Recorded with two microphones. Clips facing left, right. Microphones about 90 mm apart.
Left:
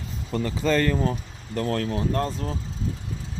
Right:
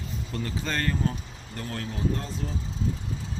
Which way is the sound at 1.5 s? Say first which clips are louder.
Left 9 dB; 90° left.